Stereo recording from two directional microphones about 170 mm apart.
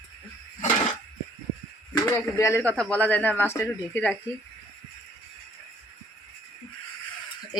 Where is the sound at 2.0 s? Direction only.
15° left (ahead or behind).